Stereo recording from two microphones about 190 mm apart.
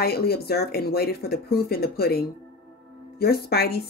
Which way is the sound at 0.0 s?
55° left (ahead or behind).